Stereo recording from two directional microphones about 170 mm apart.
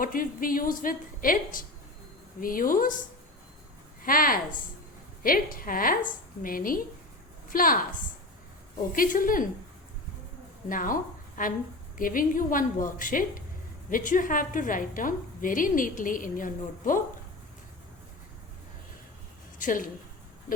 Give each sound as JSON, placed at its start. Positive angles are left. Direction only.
{"t": 0.0, "sound": "a woman's voice", "side_deg": 55}
{"t": 4.0, "sound": "a woman's voice", "side_deg": 55}
{"t": 8.9, "sound": "a woman's voice", "side_deg": 55}
{"t": 10.7, "sound": "a woman's voice", "side_deg": 55}
{"t": 19.5, "sound": "speech", "side_deg": 50}